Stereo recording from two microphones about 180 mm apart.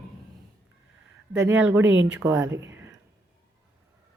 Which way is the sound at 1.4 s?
10° right (ahead or behind).